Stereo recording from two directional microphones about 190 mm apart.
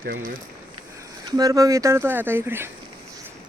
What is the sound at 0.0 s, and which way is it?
Speech, 50° right (ahead or behind).